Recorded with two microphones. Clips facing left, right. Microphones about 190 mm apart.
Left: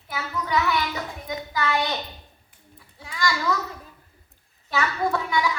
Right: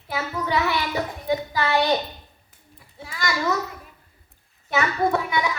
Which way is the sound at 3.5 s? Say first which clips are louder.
Right 3 dB; 20° right (ahead or behind).